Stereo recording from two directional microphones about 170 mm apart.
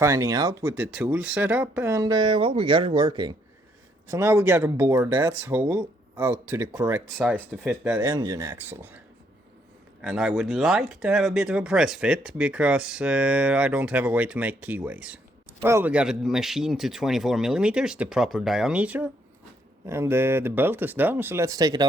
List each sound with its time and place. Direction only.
0.0 s speech: 20° right (ahead or behind)
4.1 s speech: 15° right (ahead or behind)
8.1 s speech: 20° right (ahead or behind)
10.0 s speech: 5° right (ahead or behind); by 21.8 s 20° right (ahead or behind)